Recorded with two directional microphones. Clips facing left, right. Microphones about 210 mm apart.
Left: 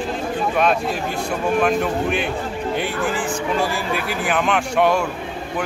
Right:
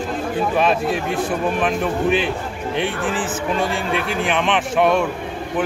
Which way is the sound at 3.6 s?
Centre (ahead or behind).